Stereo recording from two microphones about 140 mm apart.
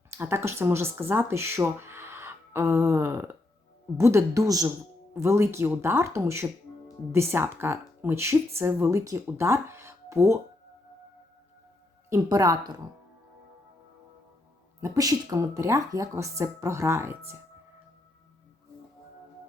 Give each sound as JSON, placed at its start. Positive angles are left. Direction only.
{"t": 0.1, "sound": "speech", "side_deg": -15}
{"t": 12.1, "sound": "speech", "side_deg": -25}
{"t": 14.8, "sound": "speech", "side_deg": -25}